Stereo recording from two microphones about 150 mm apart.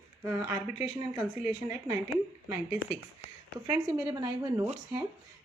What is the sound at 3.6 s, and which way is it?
Speech, 30° right (ahead or behind).